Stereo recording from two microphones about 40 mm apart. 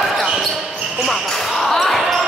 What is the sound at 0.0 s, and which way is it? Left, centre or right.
Basketball bounce, centre.